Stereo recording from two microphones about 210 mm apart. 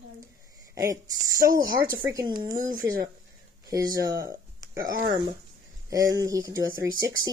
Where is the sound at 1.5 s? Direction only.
45° right (ahead or behind).